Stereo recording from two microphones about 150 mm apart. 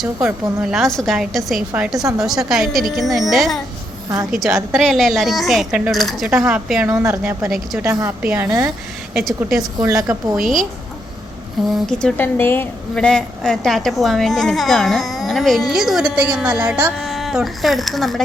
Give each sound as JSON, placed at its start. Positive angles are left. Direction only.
{"t": 0.0, "sound": "a woman's voice", "side_deg": -5}
{"t": 6.8, "sound": "a woman's voice", "side_deg": -20}
{"t": 9.7, "sound": "speech", "side_deg": -25}
{"t": 10.3, "sound": "a woman's voice", "side_deg": 0}
{"t": 11.9, "sound": "a woman's voice", "side_deg": 5}
{"t": 12.2, "sound": "a woman's voice", "side_deg": 15}